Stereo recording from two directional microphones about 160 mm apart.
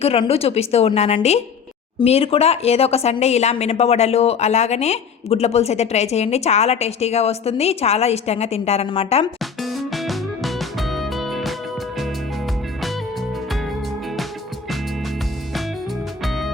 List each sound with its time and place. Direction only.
0.0 s a woman's voice: 40° left (ahead or behind)
9.4 s music: centre (ahead or behind)
16.2 s music: centre (ahead or behind)